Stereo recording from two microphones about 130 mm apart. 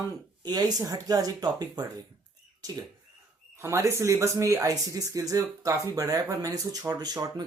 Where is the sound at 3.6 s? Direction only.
20° right (ahead or behind).